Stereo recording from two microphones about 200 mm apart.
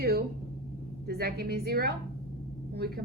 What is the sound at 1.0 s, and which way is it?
A woman's voice, 50° right (ahead or behind).